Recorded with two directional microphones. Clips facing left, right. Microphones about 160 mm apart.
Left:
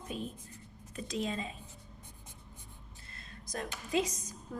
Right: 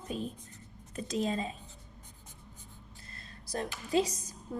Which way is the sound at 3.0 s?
35° right (ahead or behind).